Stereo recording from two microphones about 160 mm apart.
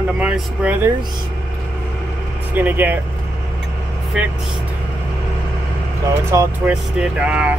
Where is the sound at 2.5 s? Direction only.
10° right (ahead or behind).